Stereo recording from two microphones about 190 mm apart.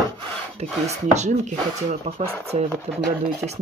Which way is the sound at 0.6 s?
35° right (ahead or behind).